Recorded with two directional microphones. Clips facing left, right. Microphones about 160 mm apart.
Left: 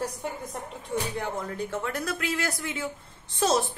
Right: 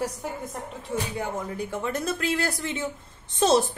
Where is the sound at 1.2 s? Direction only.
10° right (ahead or behind).